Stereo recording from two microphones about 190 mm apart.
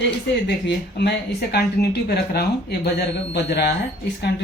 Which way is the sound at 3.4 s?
60° left (ahead or behind).